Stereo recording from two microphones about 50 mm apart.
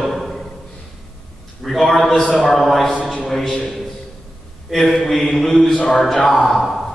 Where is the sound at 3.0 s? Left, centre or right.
Centre.